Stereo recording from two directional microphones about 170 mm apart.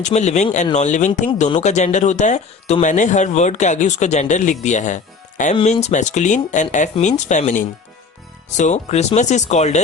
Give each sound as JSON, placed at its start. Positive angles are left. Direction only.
{"t": 0.0, "sound": "speech", "side_deg": 40}